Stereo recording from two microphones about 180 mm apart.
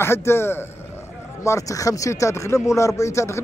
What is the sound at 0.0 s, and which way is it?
A man's voice, 15° left (ahead or behind).